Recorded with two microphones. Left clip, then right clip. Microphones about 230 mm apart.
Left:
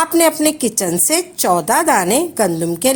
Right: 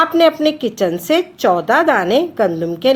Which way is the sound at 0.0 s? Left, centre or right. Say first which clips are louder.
Right 2 dB; left.